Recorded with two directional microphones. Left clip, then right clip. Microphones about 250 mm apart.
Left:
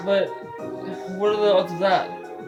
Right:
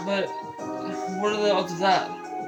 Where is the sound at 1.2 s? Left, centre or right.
Centre.